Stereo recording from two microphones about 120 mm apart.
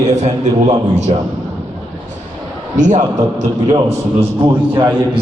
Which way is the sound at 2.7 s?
90° right.